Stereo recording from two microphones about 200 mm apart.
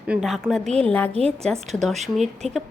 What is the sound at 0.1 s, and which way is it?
A woman's voice, centre (ahead or behind).